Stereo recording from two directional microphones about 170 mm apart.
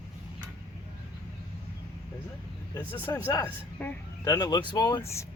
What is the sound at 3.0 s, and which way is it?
Speech, 15° left (ahead or behind).